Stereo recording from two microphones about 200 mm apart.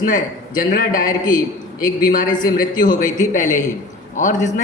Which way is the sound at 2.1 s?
40° left (ahead or behind).